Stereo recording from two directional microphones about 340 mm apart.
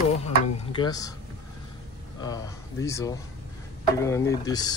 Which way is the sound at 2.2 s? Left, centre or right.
Centre.